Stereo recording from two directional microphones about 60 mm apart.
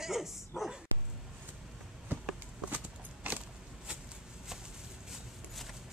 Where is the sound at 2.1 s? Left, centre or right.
Right.